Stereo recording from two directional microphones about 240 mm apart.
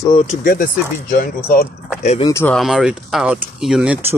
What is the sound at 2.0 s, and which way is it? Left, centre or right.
Speech, left.